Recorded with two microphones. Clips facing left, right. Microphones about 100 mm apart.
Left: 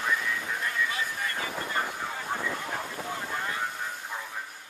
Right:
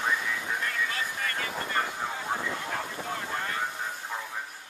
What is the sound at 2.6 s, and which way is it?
Vehicle, 10° left (ahead or behind).